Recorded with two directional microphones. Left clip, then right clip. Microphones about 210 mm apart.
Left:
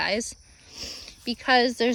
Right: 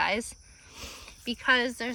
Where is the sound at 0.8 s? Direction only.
10° left (ahead or behind).